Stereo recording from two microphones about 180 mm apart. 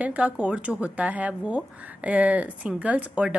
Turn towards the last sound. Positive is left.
turn(degrees=-5)  # may be behind; listen again after turning